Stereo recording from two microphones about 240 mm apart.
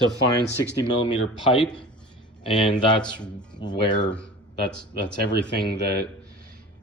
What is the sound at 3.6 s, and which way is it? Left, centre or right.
Speech, centre.